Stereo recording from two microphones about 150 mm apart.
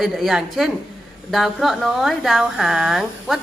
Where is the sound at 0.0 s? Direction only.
Centre (ahead or behind).